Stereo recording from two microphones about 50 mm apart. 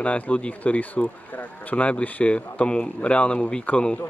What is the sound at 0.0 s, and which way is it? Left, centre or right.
A man's voice, left.